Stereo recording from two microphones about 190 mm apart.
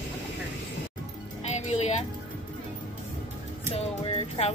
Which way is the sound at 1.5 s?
35° left (ahead or behind).